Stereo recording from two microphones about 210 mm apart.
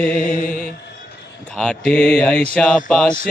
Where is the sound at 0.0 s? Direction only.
40° left (ahead or behind).